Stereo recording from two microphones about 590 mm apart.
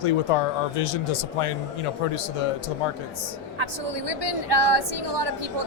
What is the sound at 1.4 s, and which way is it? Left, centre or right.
Speech, left.